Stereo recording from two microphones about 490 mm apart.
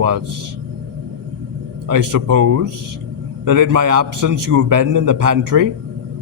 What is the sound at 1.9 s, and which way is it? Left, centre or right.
A man's voice, right.